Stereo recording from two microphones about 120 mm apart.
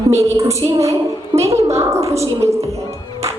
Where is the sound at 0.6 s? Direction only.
25° right (ahead or behind).